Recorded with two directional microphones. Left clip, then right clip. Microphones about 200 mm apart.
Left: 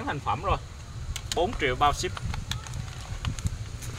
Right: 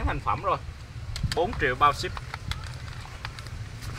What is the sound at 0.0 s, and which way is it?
Speech, 10° left (ahead or behind).